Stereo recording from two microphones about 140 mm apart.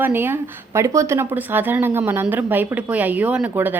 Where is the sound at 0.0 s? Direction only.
15° right (ahead or behind).